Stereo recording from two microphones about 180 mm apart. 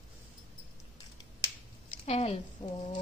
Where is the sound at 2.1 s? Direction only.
35° left (ahead or behind).